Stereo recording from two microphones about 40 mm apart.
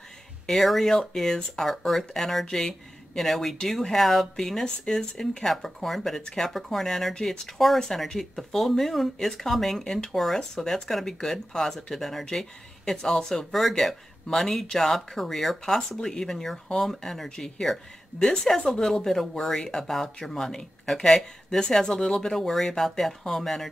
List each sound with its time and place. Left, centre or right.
0.5 s speech: centre
5.5 s speech: centre
13.5 s speech: centre